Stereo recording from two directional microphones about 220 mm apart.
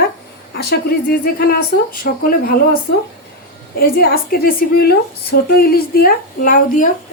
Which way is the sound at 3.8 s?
45° left (ahead or behind).